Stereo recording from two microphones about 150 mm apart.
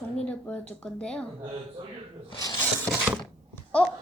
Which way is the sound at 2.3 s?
25° left (ahead or behind).